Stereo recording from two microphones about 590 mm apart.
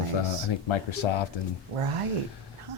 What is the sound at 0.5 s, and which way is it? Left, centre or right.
Speech, left.